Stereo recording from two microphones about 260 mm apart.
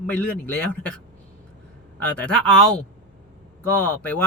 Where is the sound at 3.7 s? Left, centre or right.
Centre.